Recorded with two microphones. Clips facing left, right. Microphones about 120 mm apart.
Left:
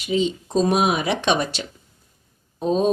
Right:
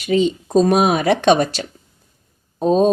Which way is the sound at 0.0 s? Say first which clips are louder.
Right 5 dB; 55° right (ahead or behind).